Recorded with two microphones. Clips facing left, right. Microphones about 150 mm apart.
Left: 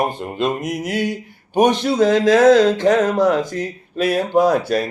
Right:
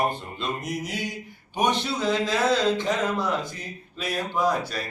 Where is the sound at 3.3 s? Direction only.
70° left (ahead or behind).